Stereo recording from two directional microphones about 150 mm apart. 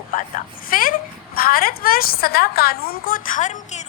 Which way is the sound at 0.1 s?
60° left (ahead or behind).